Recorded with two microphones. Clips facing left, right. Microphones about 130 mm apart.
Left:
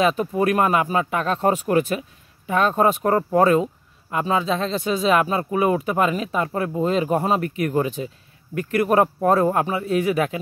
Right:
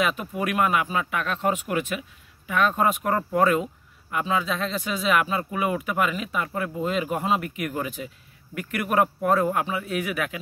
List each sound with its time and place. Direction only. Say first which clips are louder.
0.0 s speech: left 6 dB; 35° left (ahead or behind)